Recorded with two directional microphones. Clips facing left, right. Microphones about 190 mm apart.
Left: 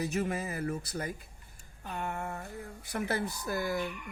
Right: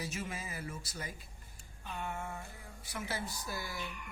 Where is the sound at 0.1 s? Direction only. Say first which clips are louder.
Left 9 dB; 55° left (ahead or behind).